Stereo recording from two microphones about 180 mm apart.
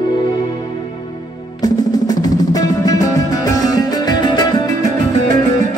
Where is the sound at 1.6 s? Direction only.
20° left (ahead or behind).